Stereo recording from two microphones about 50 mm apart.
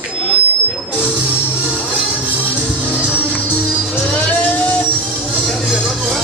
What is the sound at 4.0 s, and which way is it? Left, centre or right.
Music, centre.